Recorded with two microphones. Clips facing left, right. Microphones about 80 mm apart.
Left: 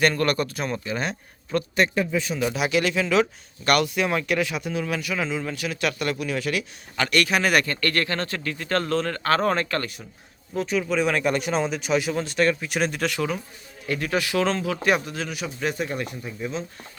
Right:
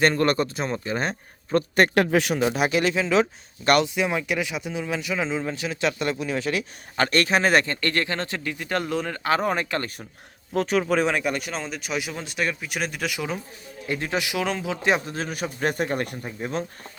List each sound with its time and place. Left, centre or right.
0.0 s speech: right
2.0 s speech: right
2.4 s speech: right; by 9.8 s centre
10.6 s speech: right
11.2 s speech: centre
13.8 s speech: right
15.1 s speech: right